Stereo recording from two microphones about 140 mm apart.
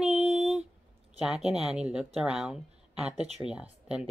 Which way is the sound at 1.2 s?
5° right (ahead or behind).